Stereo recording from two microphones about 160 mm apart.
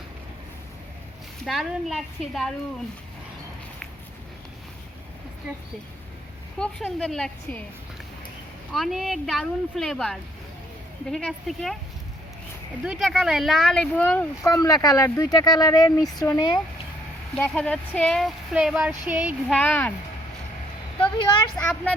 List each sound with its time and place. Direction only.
1.5 s speech: centre (ahead or behind)
6.6 s speech: 5° left (ahead or behind)
8.7 s speech: centre (ahead or behind)
12.8 s speech: centre (ahead or behind)
14.5 s speech: 20° left (ahead or behind)
17.3 s speech: 10° left (ahead or behind)
18.5 s speech: 10° right (ahead or behind)
19.5 s speech: 10° left (ahead or behind)
21.6 s speech: 15° left (ahead or behind)